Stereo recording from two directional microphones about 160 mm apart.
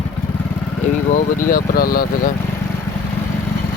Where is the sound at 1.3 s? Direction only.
60° left (ahead or behind).